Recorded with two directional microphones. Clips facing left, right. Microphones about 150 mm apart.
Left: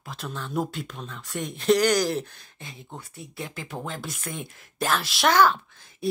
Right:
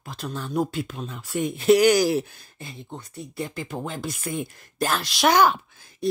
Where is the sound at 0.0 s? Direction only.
Centre (ahead or behind).